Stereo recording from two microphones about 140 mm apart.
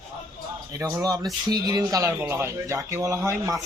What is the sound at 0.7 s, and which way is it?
A man's voice, 25° right (ahead or behind).